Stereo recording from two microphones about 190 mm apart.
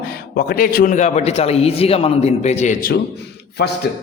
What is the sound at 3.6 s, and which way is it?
Speech, 55° left (ahead or behind).